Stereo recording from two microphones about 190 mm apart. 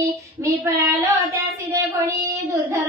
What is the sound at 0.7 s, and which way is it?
Child singing, 15° right (ahead or behind).